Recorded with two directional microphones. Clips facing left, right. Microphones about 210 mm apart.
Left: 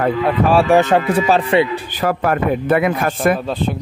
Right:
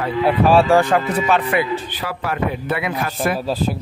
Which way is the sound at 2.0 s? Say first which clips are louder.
Left 6 dB; 50° left (ahead or behind).